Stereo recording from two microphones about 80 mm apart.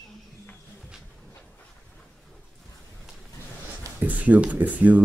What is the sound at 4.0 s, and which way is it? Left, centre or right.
Speech, centre.